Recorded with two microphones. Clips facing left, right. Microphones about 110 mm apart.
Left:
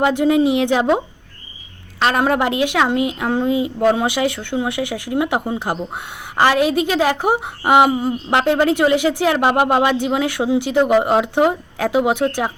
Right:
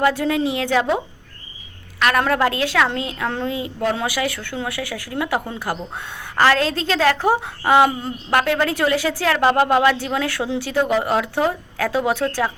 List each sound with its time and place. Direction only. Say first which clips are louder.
0.0 s a woman's voice: left 4 dB; 20° left (ahead or behind)